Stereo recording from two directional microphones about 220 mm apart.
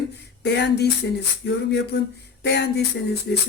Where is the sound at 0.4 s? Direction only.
50° left (ahead or behind).